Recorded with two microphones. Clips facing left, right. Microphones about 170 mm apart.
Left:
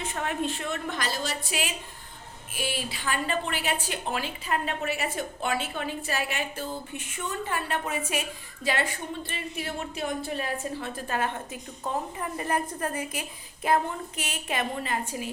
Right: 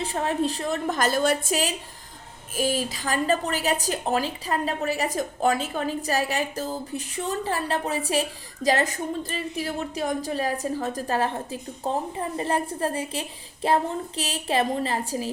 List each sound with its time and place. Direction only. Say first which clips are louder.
0.0 s a woman's voice: right 5 dB; 35° right (ahead or behind); by 1.5 s 55° right (ahead or behind)
2.6 s a woman's voice: right 7 dB; 40° right (ahead or behind)